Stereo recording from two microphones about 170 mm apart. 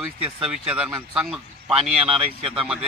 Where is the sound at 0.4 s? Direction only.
5° right (ahead or behind).